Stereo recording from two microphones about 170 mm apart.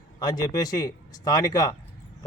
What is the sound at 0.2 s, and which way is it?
A man's voice, 25° left (ahead or behind).